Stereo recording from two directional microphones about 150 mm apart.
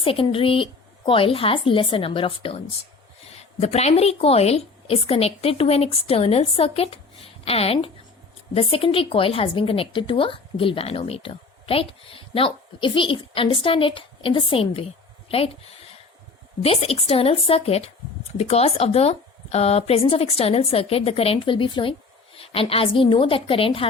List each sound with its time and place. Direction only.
0.0 s a woman's voice: 35° left (ahead or behind)
3.6 s a woman's voice: 45° left (ahead or behind)